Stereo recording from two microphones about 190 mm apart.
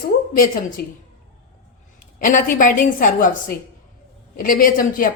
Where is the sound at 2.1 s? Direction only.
45° left (ahead or behind).